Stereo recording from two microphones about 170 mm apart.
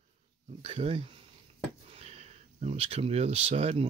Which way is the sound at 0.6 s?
35° right (ahead or behind).